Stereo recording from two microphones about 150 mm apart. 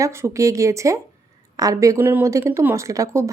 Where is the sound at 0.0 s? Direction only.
20° right (ahead or behind).